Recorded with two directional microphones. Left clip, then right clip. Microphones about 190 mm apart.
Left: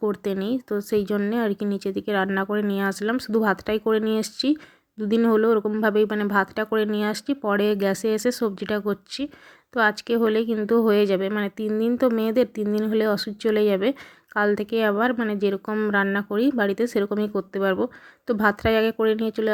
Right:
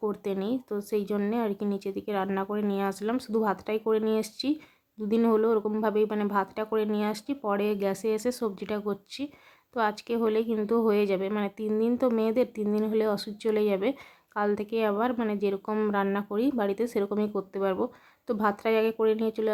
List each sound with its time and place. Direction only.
0.0 s speech: 20° left (ahead or behind)